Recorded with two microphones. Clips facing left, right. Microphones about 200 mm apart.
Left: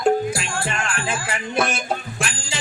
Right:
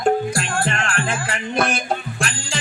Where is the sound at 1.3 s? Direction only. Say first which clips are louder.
Even; 5° left (ahead or behind).